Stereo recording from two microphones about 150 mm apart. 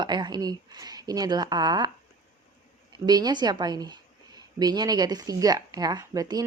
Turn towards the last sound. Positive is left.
turn(degrees=-25)  # may be behind; listen again after turning